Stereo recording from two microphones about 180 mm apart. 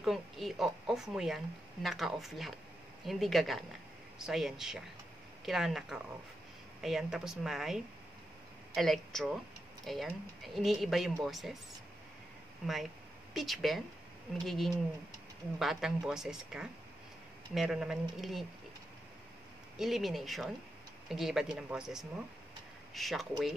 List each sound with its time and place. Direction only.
0.0 s speech: centre (ahead or behind)
12.6 s speech: centre (ahead or behind)
19.8 s speech: centre (ahead or behind)